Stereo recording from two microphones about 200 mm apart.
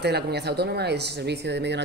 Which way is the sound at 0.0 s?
55° right (ahead or behind).